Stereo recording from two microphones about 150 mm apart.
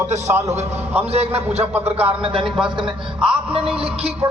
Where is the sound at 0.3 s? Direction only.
20° right (ahead or behind).